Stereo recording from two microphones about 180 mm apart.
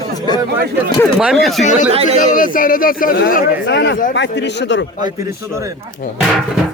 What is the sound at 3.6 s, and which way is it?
Speech, 75° left (ahead or behind).